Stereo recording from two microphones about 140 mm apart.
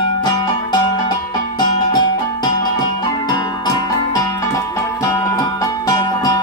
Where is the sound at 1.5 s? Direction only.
30° left (ahead or behind).